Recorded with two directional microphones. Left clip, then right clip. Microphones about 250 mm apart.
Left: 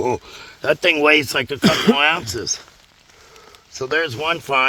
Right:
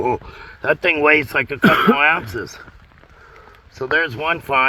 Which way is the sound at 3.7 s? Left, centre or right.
Centre.